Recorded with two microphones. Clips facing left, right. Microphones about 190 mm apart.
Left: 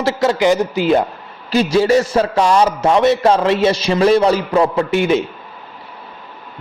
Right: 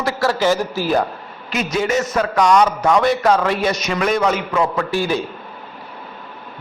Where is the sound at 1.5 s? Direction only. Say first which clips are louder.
Left 7 dB; 30° left (ahead or behind).